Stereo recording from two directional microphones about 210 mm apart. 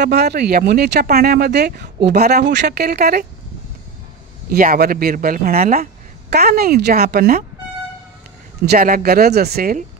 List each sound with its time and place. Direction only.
0.0 s speech: 50° right (ahead or behind)
4.5 s speech: 45° right (ahead or behind)
8.6 s speech: 45° right (ahead or behind)